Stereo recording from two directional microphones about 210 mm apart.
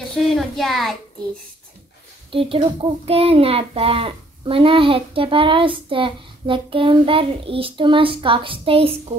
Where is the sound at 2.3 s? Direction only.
25° right (ahead or behind).